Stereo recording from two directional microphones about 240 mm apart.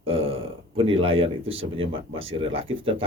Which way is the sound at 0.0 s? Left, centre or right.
Right.